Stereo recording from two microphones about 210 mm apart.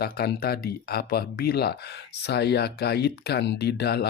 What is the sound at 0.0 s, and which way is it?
Speech, 45° left (ahead or behind).